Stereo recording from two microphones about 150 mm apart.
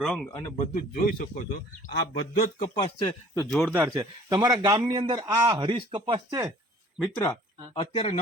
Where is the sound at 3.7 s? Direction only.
20° right (ahead or behind).